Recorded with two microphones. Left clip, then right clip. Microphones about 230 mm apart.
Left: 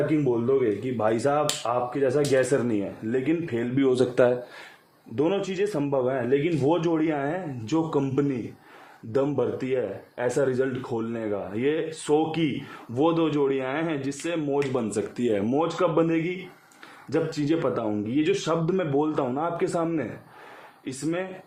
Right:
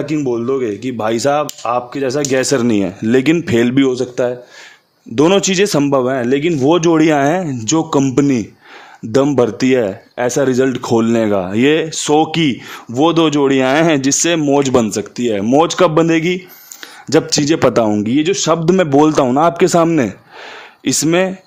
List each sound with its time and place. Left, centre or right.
0.3 s speech: right
0.9 s speech: right
3.9 s speech: centre
5.1 s speech: right
14.8 s speech: right
15.5 s speech: right